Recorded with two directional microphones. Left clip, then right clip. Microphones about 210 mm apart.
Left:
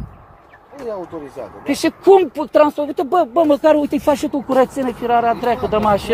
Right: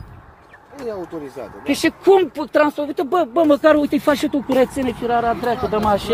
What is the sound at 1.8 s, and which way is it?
Speech, 15° left (ahead or behind).